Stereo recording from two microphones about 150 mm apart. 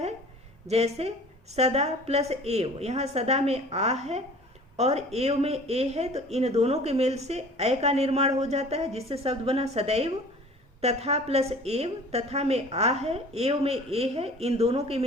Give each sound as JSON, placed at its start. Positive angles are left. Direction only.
{"t": 0.7, "sound": "speech", "side_deg": -45}